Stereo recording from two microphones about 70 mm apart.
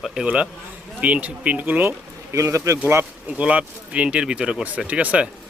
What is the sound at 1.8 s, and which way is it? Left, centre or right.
Speech, right.